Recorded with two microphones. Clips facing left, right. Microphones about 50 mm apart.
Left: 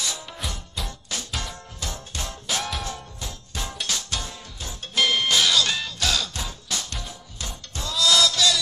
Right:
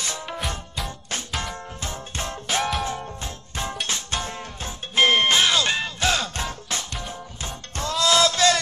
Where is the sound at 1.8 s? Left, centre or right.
Right.